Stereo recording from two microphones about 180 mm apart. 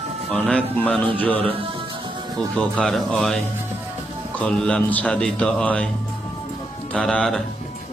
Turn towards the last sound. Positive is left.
turn(degrees=5)  # may be behind; listen again after turning